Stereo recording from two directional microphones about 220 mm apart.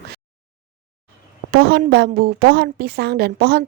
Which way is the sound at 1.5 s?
45° right (ahead or behind).